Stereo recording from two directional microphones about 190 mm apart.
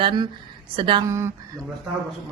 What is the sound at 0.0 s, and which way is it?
A woman's voice, 25° right (ahead or behind).